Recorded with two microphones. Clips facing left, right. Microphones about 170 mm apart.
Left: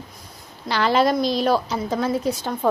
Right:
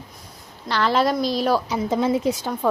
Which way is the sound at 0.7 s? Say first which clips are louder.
Left 1 dB; centre (ahead or behind).